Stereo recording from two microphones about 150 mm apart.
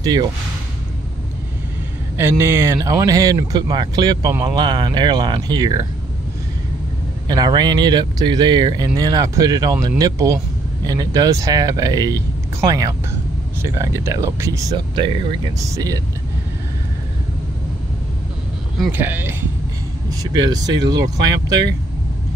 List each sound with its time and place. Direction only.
0.0 s speech: 25° right (ahead or behind)
2.1 s speech: 15° right (ahead or behind)
7.2 s speech: 25° right (ahead or behind)
15.0 s speech: 35° right (ahead or behind)
15.6 s speech: 20° right (ahead or behind)
18.9 s speech: 15° right (ahead or behind)
20.2 s speech: 25° right (ahead or behind)